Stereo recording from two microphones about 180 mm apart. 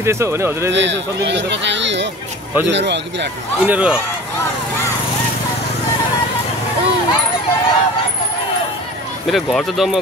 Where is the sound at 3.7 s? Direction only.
5° right (ahead or behind).